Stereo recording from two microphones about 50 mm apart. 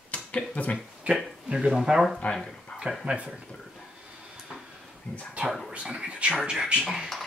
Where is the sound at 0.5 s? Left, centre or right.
Left.